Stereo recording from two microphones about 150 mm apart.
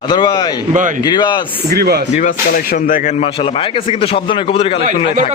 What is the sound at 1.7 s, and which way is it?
Speech, 90° right.